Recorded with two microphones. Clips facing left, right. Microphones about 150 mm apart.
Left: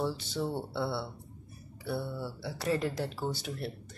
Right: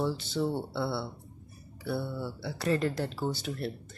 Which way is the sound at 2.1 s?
10° left (ahead or behind).